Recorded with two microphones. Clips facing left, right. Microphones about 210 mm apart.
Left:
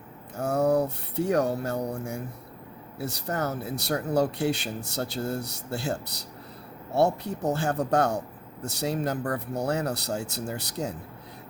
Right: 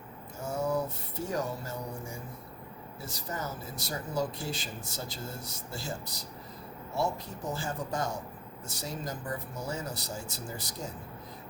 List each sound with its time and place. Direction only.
0.3 s speech: 65° left (ahead or behind)